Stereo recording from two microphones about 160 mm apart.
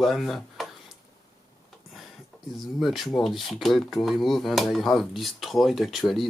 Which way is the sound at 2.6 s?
Centre (ahead or behind).